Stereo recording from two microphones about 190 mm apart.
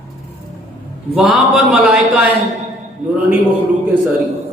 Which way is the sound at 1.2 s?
Centre (ahead or behind).